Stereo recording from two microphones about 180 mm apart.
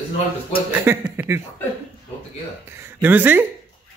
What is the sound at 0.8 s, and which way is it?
Speech, 10° right (ahead or behind).